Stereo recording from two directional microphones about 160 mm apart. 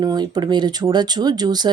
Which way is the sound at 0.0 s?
25° right (ahead or behind).